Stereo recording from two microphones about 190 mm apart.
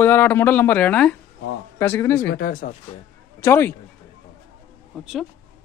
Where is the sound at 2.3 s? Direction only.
45° left (ahead or behind).